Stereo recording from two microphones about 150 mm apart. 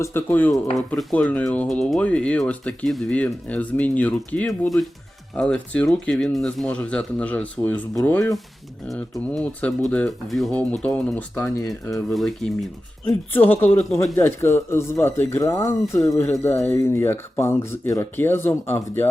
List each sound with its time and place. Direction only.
0.0 s speech: 15° left (ahead or behind)
13.3 s speech: 15° left (ahead or behind)